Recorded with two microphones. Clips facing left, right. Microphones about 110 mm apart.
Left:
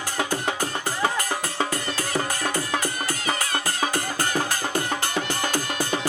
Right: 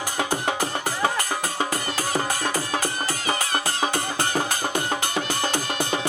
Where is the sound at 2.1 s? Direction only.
30° right (ahead or behind).